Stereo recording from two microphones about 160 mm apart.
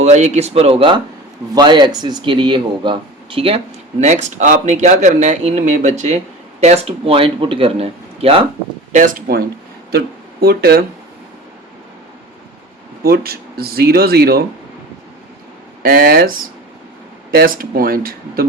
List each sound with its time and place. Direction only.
0.0 s speech: 45° right (ahead or behind)
4.0 s speech: 45° right (ahead or behind)
8.9 s speech: 55° right (ahead or behind)
10.4 s speech: 75° right (ahead or behind)
13.0 s speech: 75° right (ahead or behind)
15.8 s speech: 70° right (ahead or behind)